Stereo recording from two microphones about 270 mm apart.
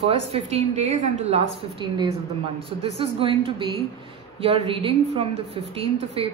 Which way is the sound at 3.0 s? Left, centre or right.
Centre.